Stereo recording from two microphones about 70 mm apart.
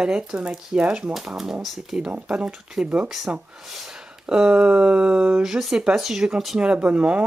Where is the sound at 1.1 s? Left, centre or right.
Centre.